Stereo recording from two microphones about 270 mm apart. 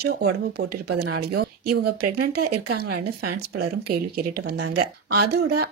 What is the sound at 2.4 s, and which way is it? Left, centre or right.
Speech, right.